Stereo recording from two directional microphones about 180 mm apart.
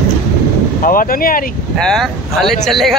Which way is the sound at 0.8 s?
50° left (ahead or behind).